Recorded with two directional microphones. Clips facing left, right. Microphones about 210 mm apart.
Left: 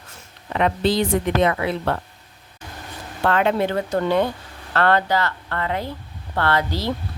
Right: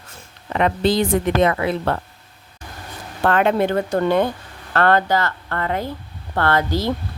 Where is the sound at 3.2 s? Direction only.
50° right (ahead or behind).